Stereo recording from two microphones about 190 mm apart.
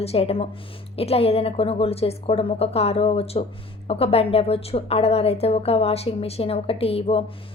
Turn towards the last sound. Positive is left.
turn(degrees=30)  # may be behind; listen again after turning